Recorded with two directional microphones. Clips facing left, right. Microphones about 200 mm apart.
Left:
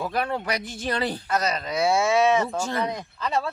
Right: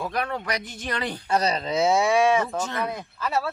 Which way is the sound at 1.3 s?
30° right (ahead or behind).